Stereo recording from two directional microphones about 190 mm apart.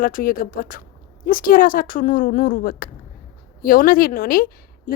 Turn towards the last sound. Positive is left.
turn(degrees=50)  # may be behind; listen again after turning